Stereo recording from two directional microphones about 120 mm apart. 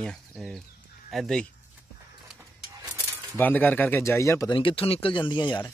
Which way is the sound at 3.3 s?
15° left (ahead or behind).